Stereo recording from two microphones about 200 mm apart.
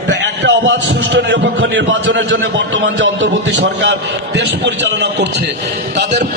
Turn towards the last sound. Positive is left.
turn(degrees=-60)  # may be behind; listen again after turning